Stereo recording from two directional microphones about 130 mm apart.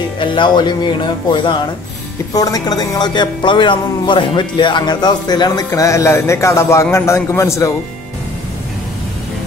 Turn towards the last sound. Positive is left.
turn(degrees=20)  # may be behind; listen again after turning